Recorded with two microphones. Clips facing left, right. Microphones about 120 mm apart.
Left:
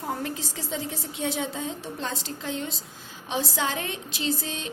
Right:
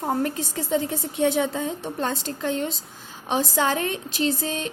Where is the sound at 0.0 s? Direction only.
50° right (ahead or behind).